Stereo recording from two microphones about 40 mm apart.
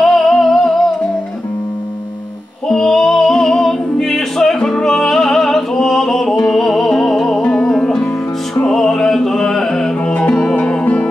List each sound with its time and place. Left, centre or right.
0.0 s music: centre
2.7 s music: centre
9.9 s music: left